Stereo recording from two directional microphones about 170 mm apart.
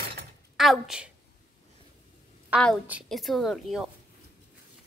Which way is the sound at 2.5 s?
5° left (ahead or behind).